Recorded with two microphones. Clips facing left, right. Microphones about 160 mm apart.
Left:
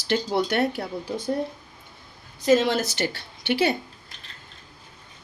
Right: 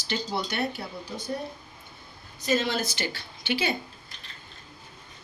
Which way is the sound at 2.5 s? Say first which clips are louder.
Left 7 dB; 90° left.